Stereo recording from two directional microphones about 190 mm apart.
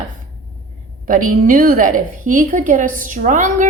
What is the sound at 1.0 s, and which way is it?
A woman's voice, 45° right (ahead or behind).